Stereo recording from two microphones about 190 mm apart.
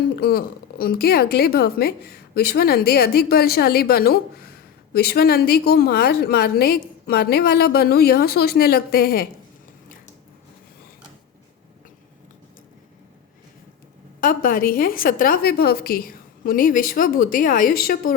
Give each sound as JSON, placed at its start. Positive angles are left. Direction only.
{"t": 0.2, "sound": "a woman's voice", "side_deg": 55}
{"t": 14.2, "sound": "a woman's voice", "side_deg": 45}